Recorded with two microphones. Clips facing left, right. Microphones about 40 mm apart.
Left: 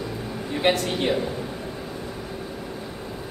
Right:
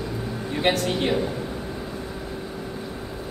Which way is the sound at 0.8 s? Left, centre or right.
Centre.